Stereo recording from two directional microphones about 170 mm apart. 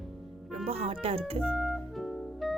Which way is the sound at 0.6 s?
35° right (ahead or behind).